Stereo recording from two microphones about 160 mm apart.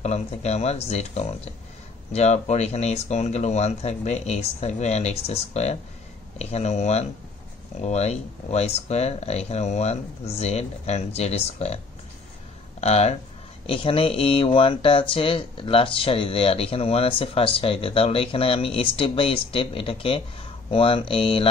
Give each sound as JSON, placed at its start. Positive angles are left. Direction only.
{"t": 0.0, "sound": "speech", "side_deg": 45}
{"t": 12.8, "sound": "speech", "side_deg": 40}